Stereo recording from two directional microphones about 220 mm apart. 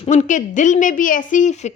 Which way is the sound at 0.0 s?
35° left (ahead or behind).